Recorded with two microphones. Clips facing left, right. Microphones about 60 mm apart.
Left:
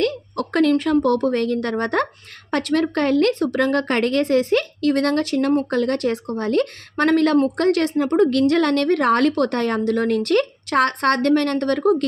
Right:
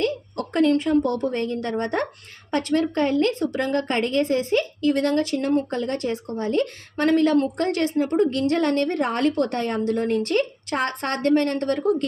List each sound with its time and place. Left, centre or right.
0.0 s a woman's voice: left
10.2 s speech: left